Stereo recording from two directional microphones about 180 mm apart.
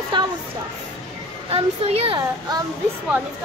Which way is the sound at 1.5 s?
35° right (ahead or behind).